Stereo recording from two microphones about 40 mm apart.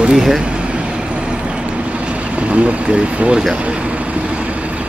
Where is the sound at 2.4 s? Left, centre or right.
Right.